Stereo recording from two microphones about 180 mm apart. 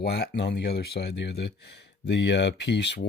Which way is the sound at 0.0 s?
65° left (ahead or behind).